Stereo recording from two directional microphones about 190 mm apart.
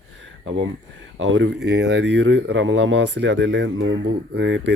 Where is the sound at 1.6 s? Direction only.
60° right (ahead or behind).